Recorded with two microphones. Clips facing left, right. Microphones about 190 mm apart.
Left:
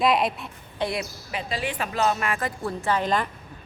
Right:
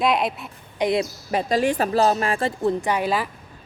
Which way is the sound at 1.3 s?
45° right (ahead or behind).